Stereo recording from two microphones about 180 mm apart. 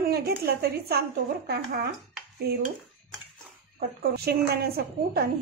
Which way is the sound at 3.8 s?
60° right (ahead or behind).